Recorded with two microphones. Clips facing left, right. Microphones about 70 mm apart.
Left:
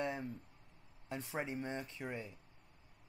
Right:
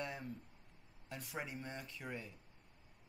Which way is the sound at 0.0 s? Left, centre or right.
Left.